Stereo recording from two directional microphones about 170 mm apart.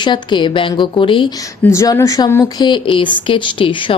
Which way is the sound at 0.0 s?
25° left (ahead or behind).